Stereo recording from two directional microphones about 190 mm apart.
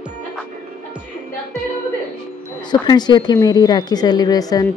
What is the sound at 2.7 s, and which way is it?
Speech, 20° left (ahead or behind).